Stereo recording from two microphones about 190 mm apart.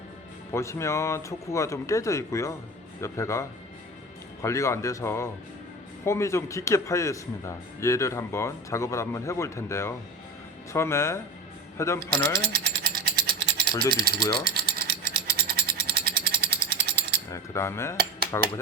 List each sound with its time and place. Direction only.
0.5 s speech: 15° left (ahead or behind)
4.4 s speech: 15° left (ahead or behind)
12.4 s mechanisms: 55° right (ahead or behind)
14.5 s a sound: 55° right (ahead or behind)
17.3 s speech: 15° left (ahead or behind)